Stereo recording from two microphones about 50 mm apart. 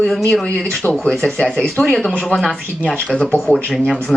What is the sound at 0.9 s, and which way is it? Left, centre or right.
Speech, centre.